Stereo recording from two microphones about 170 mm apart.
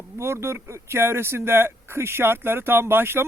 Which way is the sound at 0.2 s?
15° right (ahead or behind).